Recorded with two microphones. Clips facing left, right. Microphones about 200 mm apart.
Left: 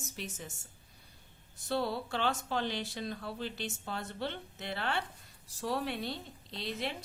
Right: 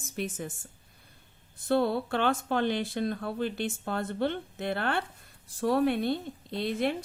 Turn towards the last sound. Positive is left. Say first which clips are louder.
# right 9 dB
turn(degrees=-55)  # may be behind; listen again after turning